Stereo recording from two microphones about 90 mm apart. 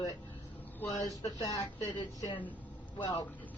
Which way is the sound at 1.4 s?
50° left (ahead or behind).